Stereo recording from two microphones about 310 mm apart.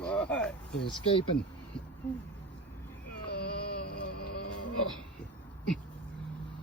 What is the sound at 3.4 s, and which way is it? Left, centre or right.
Music, left.